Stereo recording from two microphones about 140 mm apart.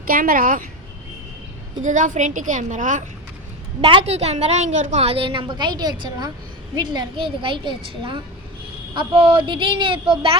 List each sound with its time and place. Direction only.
0.1 s a woman's voice: 85° right
1.8 s a woman's voice: 65° right (ahead or behind)
3.8 s a woman's voice: 40° right (ahead or behind)
9.0 s a woman's voice: 35° right (ahead or behind)